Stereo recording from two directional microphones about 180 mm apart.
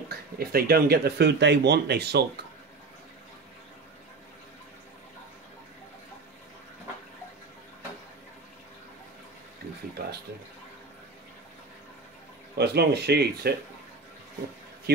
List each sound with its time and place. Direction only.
0.1 s speech: 55° right (ahead or behind)
12.5 s speech: 65° right (ahead or behind)